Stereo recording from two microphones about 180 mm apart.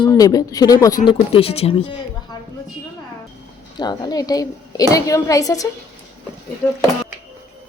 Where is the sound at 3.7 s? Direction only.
20° left (ahead or behind).